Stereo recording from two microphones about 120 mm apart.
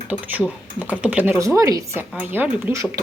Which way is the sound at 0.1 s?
15° right (ahead or behind).